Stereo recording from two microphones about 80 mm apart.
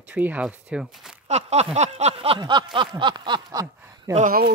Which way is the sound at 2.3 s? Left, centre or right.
Right.